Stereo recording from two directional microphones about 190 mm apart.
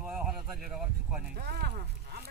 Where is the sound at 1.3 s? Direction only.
55° right (ahead or behind).